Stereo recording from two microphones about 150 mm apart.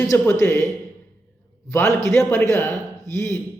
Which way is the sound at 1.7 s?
20° left (ahead or behind).